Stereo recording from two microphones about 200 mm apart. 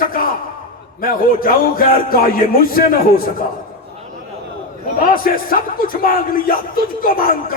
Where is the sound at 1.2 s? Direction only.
45° left (ahead or behind).